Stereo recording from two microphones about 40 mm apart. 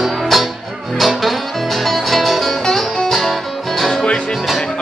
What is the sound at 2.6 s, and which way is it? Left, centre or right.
Music, centre.